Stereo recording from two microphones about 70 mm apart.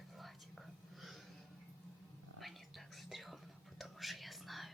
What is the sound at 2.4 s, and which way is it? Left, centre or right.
Whispering, centre.